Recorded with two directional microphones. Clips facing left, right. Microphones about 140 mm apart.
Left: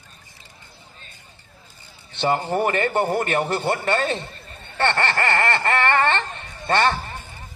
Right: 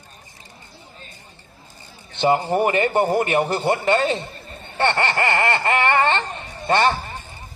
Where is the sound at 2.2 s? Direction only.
15° right (ahead or behind).